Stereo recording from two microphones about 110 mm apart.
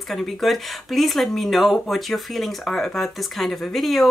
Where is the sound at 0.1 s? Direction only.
Centre (ahead or behind).